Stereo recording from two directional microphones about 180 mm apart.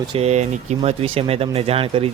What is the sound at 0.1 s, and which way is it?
Speech, 35° right (ahead or behind).